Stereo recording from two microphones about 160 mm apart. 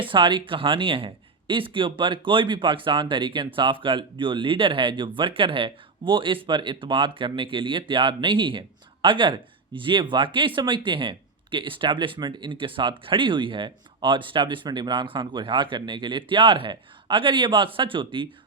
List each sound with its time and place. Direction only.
0.0 s speech: 30° right (ahead or behind)